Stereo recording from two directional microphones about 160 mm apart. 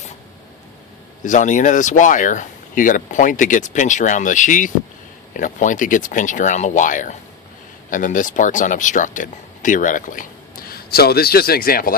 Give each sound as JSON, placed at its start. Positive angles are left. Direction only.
{"t": 1.2, "sound": "speech", "side_deg": 50}